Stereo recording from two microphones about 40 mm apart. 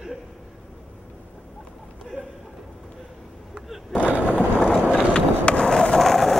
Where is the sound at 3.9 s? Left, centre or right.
Right.